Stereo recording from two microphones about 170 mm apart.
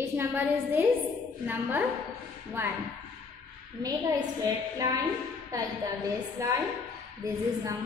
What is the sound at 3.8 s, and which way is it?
Speech, 20° right (ahead or behind).